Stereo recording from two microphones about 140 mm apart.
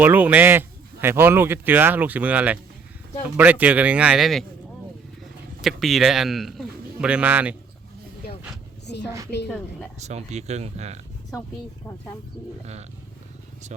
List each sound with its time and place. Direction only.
0.0 s speech: 15° right (ahead or behind)
5.6 s speech: centre (ahead or behind)
10.0 s speech: 50° right (ahead or behind)